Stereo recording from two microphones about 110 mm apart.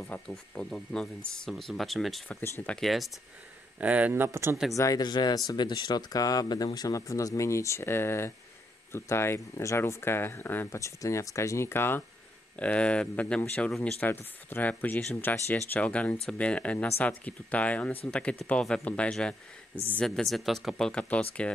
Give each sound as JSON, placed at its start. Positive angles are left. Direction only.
{"t": 0.3, "sound": "speech", "side_deg": 5}
{"t": 3.8, "sound": "speech", "side_deg": -15}
{"t": 4.7, "sound": "speech", "side_deg": 30}
{"t": 15.5, "sound": "speech", "side_deg": 10}
{"t": 19.7, "sound": "speech", "side_deg": -15}
{"t": 20.0, "sound": "speech", "side_deg": 5}